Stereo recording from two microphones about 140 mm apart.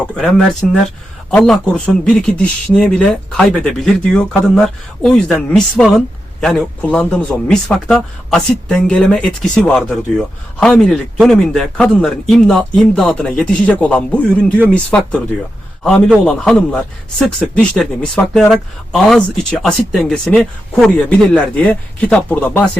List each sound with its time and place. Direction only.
0.0 s speech: 5° left (ahead or behind)
16.2 s speech: 5° left (ahead or behind)